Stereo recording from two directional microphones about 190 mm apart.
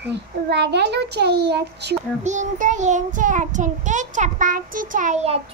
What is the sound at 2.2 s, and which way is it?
Child singing, 40° right (ahead or behind).